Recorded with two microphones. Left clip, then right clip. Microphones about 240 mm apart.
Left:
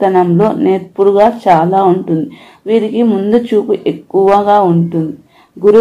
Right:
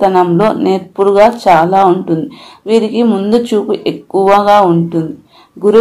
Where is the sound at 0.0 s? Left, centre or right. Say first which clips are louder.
Right 1 dB; right.